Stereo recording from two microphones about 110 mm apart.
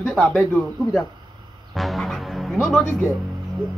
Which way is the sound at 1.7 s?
Centre (ahead or behind).